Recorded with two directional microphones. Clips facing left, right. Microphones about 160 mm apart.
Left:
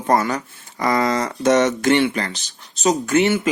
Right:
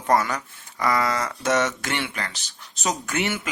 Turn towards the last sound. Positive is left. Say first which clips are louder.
# left 10 dB
turn(degrees=30)  # may be behind; listen again after turning